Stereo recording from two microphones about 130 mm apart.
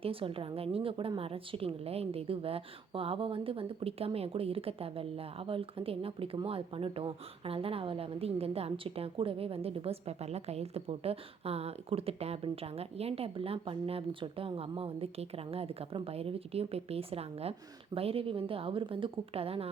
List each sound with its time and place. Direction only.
0.0 s a woman's voice: 45° right (ahead or behind)